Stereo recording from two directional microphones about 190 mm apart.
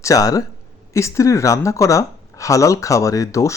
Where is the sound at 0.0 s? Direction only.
20° left (ahead or behind).